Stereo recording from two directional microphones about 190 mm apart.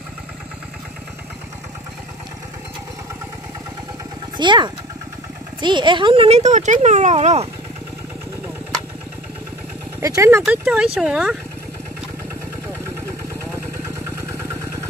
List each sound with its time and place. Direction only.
4.4 s speech: 25° right (ahead or behind)
9.9 s speech: 15° right (ahead or behind)
10.4 s speech: 5° right (ahead or behind)
13.9 s vehicle: 15° right (ahead or behind)